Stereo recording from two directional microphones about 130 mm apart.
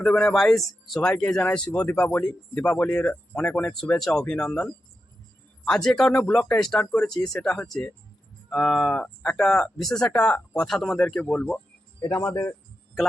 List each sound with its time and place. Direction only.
0.0 s speech: 5° left (ahead or behind)
12.1 s speech: 20° left (ahead or behind)
13.0 s speech: centre (ahead or behind)